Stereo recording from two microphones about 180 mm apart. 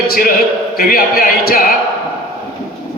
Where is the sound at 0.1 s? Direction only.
55° left (ahead or behind).